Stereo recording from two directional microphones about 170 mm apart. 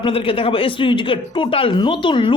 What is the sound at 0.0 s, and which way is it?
Speech, 35° left (ahead or behind).